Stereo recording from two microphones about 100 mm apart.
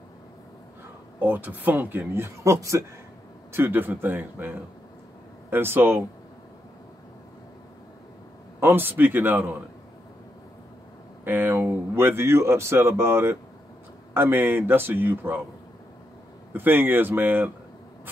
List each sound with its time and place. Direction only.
1.2 s speech: 15° right (ahead or behind)
3.5 s speech: 20° right (ahead or behind)
8.5 s speech: 20° right (ahead or behind)
11.2 s speech: 20° right (ahead or behind)
16.5 s speech: 20° right (ahead or behind)